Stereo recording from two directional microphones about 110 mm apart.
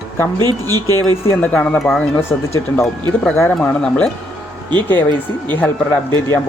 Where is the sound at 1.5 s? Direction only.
10° left (ahead or behind).